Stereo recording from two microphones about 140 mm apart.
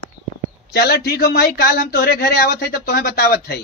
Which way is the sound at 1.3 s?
90° left.